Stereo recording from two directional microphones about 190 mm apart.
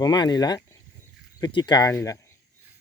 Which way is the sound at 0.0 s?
20° left (ahead or behind).